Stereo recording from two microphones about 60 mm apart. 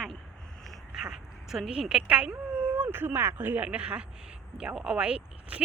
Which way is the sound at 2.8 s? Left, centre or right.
Right.